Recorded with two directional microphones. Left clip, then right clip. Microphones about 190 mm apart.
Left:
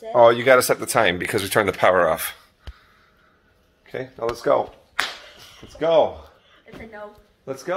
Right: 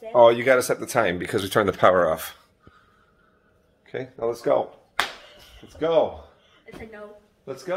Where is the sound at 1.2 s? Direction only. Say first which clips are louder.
Left 2 dB; 15° right (ahead or behind).